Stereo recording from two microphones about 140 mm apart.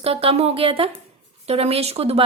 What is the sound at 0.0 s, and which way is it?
A woman's voice, 45° right (ahead or behind).